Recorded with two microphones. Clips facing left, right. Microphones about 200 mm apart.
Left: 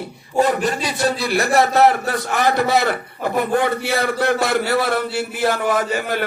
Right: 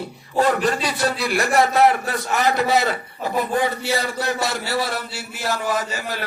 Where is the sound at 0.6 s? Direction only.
25° left (ahead or behind).